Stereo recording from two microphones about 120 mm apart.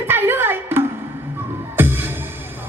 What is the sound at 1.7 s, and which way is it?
Music, 20° right (ahead or behind).